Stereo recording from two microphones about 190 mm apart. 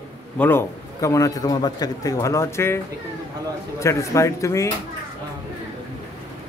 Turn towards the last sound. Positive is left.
turn(degrees=15)  # may be behind; listen again after turning